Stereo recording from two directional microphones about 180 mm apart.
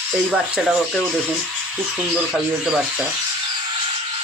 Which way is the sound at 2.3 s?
5° right (ahead or behind).